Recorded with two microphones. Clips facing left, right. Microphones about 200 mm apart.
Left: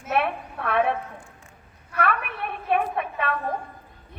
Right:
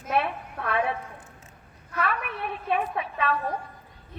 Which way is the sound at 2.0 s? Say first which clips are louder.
Left 3 dB; 55° left (ahead or behind).